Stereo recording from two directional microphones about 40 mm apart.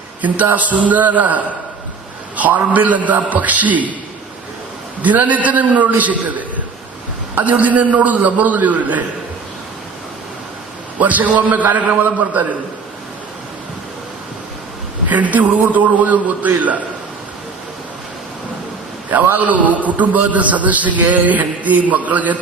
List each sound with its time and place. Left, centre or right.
0.5 s a man's voice: right
5.0 s a man's voice: right
7.3 s a man's voice: right
11.0 s a man's voice: right
15.1 s a man's voice: right
19.4 s a man's voice: right